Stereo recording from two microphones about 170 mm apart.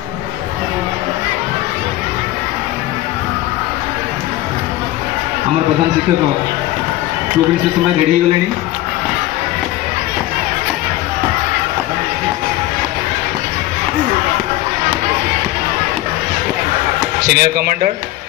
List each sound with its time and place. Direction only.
17.3 s speech: 65° right (ahead or behind)